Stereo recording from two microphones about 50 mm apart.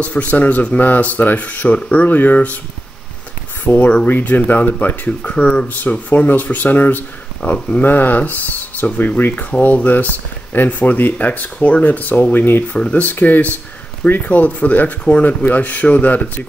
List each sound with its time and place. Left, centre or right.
0.0 s speech: left
3.6 s speech: left
7.4 s speech: left
7.8 s speech: left
12.7 s speech: left
13.0 s speech: left